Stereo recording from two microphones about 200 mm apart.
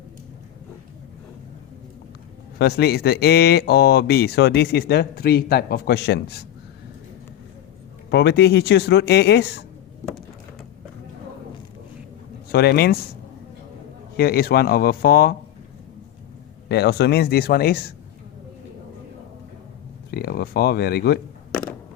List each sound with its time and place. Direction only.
2.6 s speech: 55° left (ahead or behind)
8.1 s speech: 55° left (ahead or behind)
12.5 s speech: 50° left (ahead or behind)
14.2 s speech: 50° left (ahead or behind)
16.6 s speech: 55° left (ahead or behind)
20.1 s speech: 50° left (ahead or behind)